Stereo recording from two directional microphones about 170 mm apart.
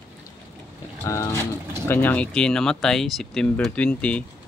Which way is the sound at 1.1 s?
15° left (ahead or behind).